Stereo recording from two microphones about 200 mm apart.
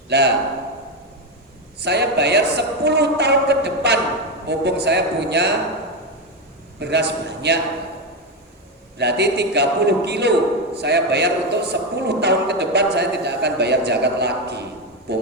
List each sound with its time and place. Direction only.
0.1 s a man's voice: 55° right (ahead or behind)
1.8 s a man's voice: 55° right (ahead or behind)
6.7 s a man's voice: 55° right (ahead or behind)
9.0 s a man's voice: 55° right (ahead or behind)